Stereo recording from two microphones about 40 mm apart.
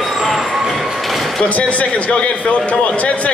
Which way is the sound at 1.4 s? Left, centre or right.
Left.